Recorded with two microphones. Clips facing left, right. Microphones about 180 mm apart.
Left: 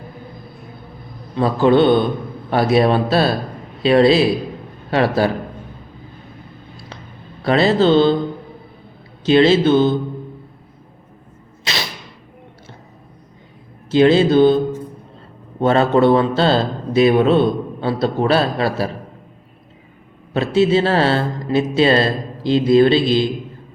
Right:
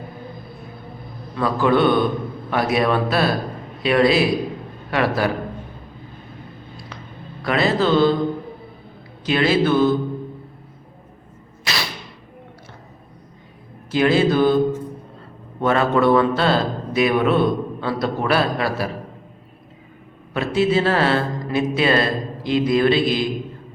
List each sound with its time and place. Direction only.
1.4 s a man's voice: 25° left (ahead or behind)
7.4 s a man's voice: 30° left (ahead or behind)
9.2 s a man's voice: 25° left (ahead or behind)
13.9 s a man's voice: 25° left (ahead or behind)
15.6 s a man's voice: 30° left (ahead or behind)
20.3 s a man's voice: 25° left (ahead or behind)